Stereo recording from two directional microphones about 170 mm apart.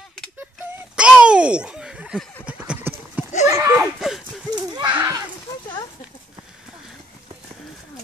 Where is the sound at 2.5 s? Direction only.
10° right (ahead or behind).